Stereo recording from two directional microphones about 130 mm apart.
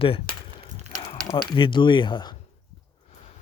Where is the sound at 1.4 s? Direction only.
40° left (ahead or behind).